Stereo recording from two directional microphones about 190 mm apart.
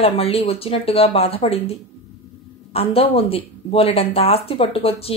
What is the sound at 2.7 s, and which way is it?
Speech, 30° left (ahead or behind).